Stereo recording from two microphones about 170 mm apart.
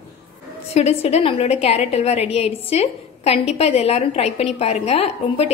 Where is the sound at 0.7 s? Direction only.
40° left (ahead or behind).